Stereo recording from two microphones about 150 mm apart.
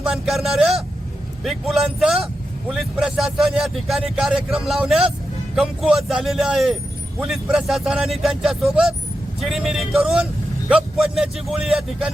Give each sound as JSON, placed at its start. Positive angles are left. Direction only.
{"t": 0.0, "sound": "a man's voice", "side_deg": 0}